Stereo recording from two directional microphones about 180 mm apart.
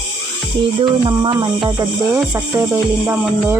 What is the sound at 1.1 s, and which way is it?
Speech, 25° right (ahead or behind).